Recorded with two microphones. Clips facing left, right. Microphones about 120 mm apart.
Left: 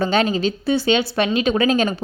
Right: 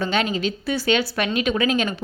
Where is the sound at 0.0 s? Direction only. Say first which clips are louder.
Left 4 dB; 35° left (ahead or behind).